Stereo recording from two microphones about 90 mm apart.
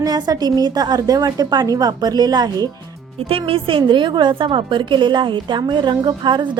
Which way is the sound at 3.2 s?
90° right.